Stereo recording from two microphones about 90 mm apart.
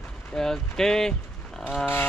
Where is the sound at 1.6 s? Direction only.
5° left (ahead or behind).